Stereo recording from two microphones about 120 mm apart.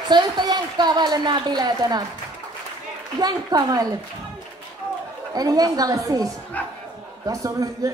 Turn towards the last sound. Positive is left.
turn(degrees=-30)  # may be behind; listen again after turning